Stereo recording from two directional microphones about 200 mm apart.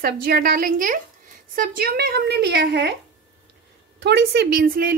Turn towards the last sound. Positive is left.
turn(degrees=-50)  # may be behind; listen again after turning